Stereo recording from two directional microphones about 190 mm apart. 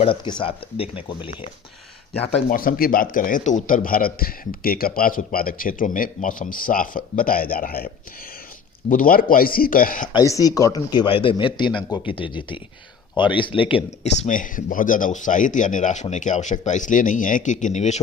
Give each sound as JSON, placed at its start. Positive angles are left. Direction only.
{"t": 0.0, "sound": "speech", "side_deg": 25}
{"t": 2.5, "sound": "a man's voice", "side_deg": 50}
{"t": 8.9, "sound": "a man's voice", "side_deg": 50}
{"t": 10.1, "sound": "speech", "side_deg": 20}
{"t": 14.3, "sound": "a man's voice", "side_deg": 45}